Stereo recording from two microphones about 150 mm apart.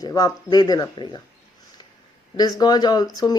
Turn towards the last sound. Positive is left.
turn(degrees=25)  # may be behind; listen again after turning